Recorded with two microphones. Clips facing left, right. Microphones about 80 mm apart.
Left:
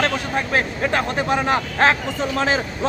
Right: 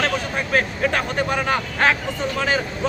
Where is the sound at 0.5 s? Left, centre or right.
Centre.